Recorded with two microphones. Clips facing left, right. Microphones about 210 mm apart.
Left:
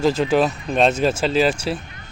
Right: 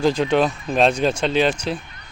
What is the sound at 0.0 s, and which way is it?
Speech, centre (ahead or behind).